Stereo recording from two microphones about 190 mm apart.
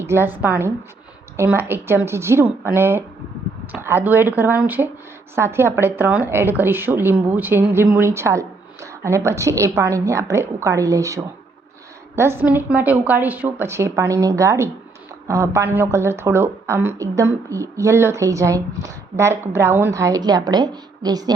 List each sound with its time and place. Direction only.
0.0 s a woman's voice: 15° right (ahead or behind)